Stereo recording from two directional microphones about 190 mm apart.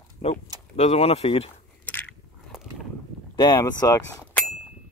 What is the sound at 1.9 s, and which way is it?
Biting, 10° left (ahead or behind).